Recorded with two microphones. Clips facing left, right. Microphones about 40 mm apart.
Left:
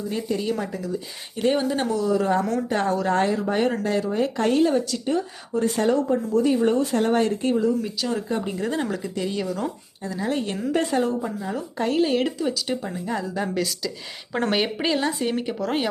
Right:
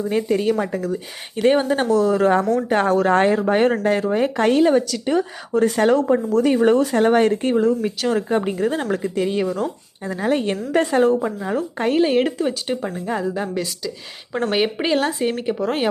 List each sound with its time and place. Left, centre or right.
0.1 s speech: right
9.0 s speech: right
11.2 s speech: right
11.5 s speech: right
12.9 s a woman's voice: right